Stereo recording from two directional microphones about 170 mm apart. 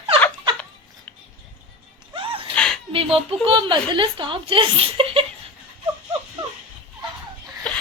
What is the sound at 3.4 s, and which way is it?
Speech, 30° right (ahead or behind).